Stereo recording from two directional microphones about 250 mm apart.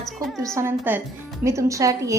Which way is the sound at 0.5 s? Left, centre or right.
Centre.